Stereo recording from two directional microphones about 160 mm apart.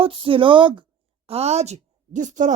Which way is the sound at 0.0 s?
35° right (ahead or behind).